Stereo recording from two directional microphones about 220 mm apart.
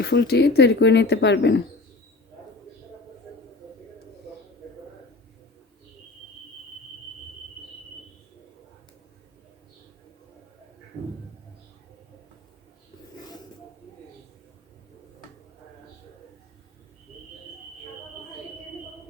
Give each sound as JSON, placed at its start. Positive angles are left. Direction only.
{"t": 0.0, "sound": "speech", "side_deg": 45}